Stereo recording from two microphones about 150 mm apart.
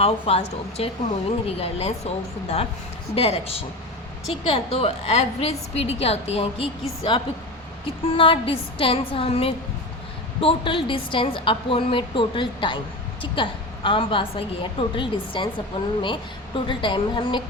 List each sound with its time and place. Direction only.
0.0 s a woman's voice: 40° left (ahead or behind)